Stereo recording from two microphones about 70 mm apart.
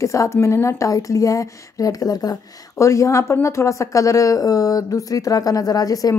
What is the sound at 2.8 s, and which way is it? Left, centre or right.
A woman's voice, left.